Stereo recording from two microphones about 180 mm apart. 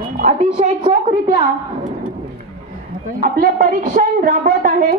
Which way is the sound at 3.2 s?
50° right (ahead or behind).